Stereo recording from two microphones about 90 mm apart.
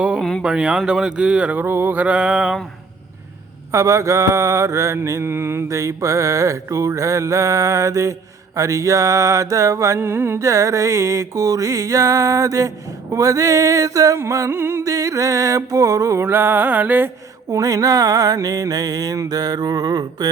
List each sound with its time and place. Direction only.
0.2 s speech: 5° left (ahead or behind)
0.4 s speech: 10° right (ahead or behind)
1.6 s speech: 25° right (ahead or behind)
3.7 s mantra: 35° right (ahead or behind)
17.5 s mantra: 40° right (ahead or behind)